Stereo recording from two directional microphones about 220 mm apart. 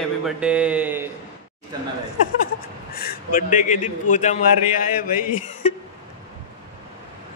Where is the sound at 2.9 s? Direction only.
45° left (ahead or behind).